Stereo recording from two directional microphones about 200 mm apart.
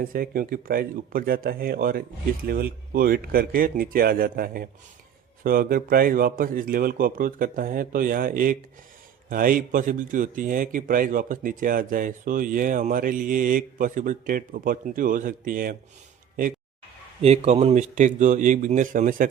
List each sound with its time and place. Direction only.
0.0 s speech: 45° right (ahead or behind)
17.2 s a man's voice: 30° right (ahead or behind)